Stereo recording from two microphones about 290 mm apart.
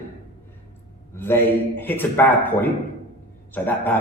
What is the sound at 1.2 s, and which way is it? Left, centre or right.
Speech, centre.